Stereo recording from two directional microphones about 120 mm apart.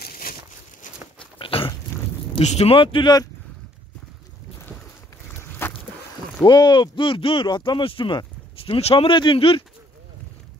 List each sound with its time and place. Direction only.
1.2 s dog: 45° left (ahead or behind)
2.4 s speech: 60° left (ahead or behind); by 3.3 s 40° left (ahead or behind)
5.6 s vehicle: 20° left (ahead or behind)
6.4 s speech: 35° left (ahead or behind)